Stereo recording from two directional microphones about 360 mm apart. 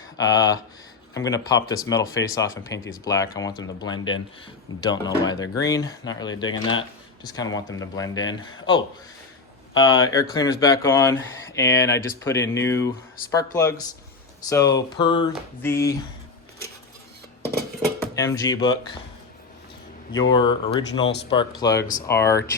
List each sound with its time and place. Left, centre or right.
0.2 s speech: centre
18.0 s speech: centre
20.3 s speech: centre
21.8 s speech: left
22.0 s speech: centre